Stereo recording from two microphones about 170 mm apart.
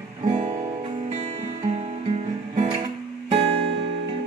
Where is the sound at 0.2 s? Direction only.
30° right (ahead or behind).